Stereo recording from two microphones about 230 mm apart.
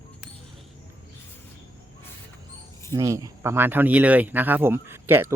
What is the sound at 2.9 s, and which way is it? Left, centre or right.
A man's voice, centre.